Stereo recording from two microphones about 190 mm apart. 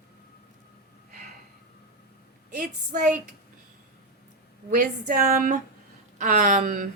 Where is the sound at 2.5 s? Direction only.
45° right (ahead or behind).